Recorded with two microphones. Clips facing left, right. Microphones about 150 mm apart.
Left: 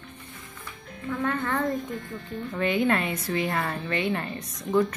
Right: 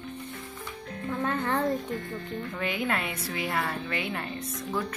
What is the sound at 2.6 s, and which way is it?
A woman's voice, 5° right (ahead or behind).